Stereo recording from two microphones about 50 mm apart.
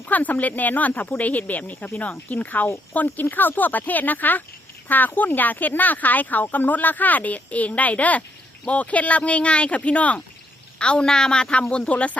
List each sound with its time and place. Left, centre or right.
0.1 s speech: left